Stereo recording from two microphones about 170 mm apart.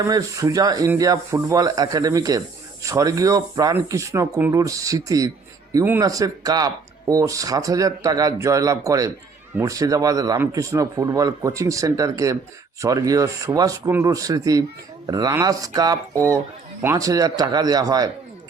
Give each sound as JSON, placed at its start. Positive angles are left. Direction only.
{"t": 0.0, "sound": "speech", "side_deg": -20}